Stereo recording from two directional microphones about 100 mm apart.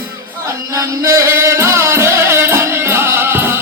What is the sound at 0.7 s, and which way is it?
Music, 30° right (ahead or behind).